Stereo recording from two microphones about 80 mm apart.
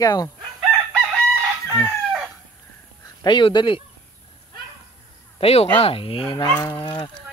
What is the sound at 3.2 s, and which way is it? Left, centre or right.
Speech, left.